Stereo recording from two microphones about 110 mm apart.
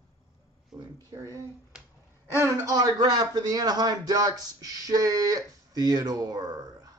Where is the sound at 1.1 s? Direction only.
25° right (ahead or behind).